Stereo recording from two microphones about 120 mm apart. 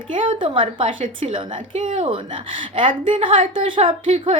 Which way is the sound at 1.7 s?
90° right.